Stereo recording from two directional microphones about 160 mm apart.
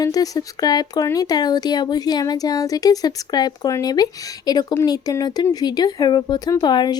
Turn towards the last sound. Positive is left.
turn(degrees=25)  # may be behind; listen again after turning